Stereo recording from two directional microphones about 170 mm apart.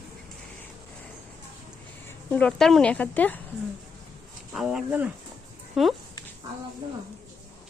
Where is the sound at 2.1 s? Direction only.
10° left (ahead or behind).